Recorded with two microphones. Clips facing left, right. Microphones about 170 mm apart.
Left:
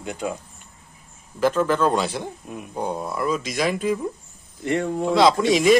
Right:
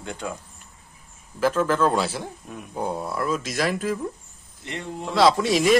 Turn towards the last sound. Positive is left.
turn(degrees=0)  # may be behind; listen again after turning